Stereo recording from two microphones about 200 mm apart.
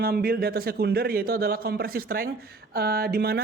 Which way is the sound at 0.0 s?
50° right (ahead or behind).